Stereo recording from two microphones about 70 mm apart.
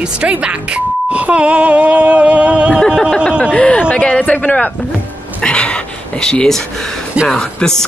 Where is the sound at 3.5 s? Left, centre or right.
Centre.